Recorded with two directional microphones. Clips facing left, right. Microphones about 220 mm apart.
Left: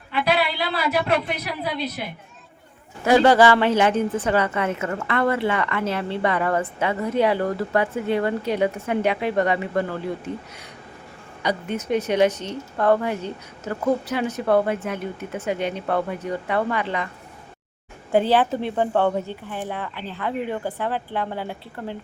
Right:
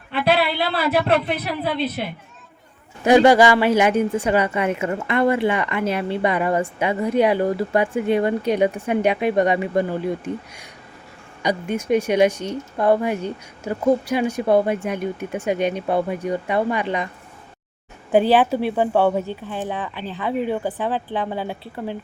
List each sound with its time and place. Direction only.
0.1 s a sound: 30° right (ahead or behind)
1.0 s a woman's voice: 30° right (ahead or behind)
3.0 s a woman's voice: 15° right (ahead or behind)
18.1 s a woman's voice: 15° right (ahead or behind)